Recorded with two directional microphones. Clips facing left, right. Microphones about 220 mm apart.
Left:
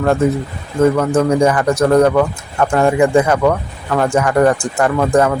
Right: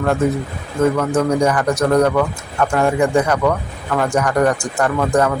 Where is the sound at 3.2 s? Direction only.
25° left (ahead or behind).